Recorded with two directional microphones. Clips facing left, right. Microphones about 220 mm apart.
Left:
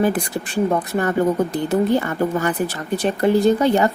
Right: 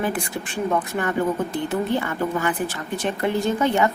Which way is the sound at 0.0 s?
40° left (ahead or behind).